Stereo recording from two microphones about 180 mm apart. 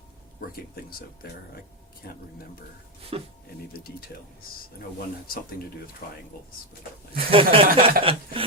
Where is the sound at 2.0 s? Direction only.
60° left (ahead or behind).